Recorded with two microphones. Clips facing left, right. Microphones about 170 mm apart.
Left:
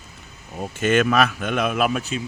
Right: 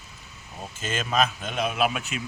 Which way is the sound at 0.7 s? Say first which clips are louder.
Left 8 dB; 65° left (ahead or behind).